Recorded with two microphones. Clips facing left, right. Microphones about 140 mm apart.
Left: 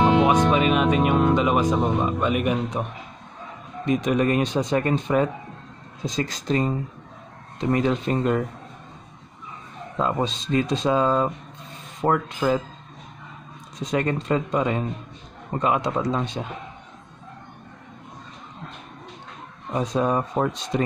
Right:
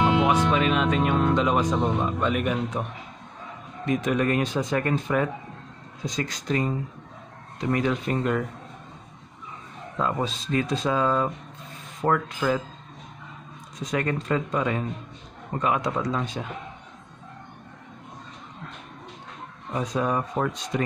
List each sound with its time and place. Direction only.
0.0 s music: 35° left (ahead or behind)
0.5 s speech: 15° left (ahead or behind)
9.9 s speech: 25° left (ahead or behind)
13.7 s speech: 25° left (ahead or behind)
19.7 s speech: 25° left (ahead or behind)